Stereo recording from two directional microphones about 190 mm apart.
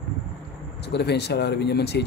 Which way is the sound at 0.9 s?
60° left (ahead or behind).